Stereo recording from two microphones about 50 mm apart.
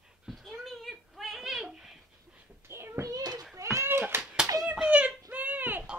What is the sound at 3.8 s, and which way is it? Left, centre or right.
Cat, right.